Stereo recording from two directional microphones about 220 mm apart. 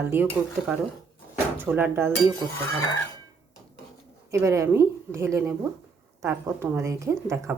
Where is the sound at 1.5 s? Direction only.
10° right (ahead or behind).